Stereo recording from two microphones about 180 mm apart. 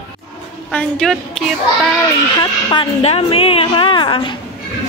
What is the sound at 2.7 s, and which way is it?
A woman's voice, 30° left (ahead or behind).